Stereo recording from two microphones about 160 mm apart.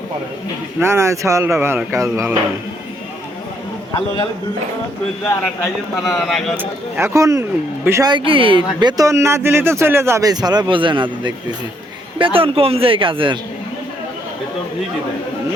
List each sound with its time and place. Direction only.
0.8 s speech: 15° right (ahead or behind)
5.2 s a man's voice: 15° left (ahead or behind)
6.0 s speech: centre (ahead or behind)
6.6 s speech: 15° right (ahead or behind)
8.1 s speech: 35° right (ahead or behind)